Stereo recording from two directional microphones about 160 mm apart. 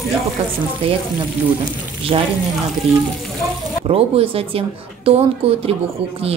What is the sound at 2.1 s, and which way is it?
Speech, 35° right (ahead or behind).